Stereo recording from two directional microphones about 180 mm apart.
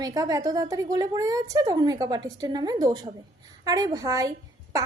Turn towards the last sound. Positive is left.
turn(degrees=-20)  # may be behind; listen again after turning